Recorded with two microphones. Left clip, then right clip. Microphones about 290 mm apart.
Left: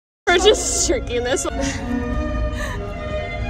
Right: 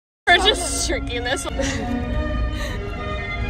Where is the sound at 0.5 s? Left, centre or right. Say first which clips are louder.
Left 3 dB; left.